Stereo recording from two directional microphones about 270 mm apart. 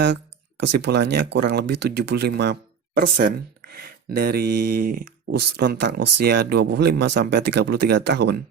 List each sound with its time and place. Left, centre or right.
0.6 s speech: right